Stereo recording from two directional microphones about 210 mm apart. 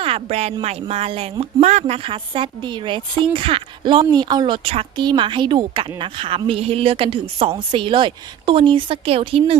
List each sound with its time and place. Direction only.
0.0 s a woman's voice: 30° right (ahead or behind)